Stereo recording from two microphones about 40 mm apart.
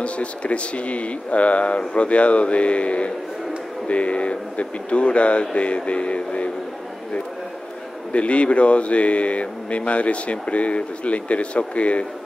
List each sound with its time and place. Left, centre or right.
0.0 s speech: left
8.1 s speech: left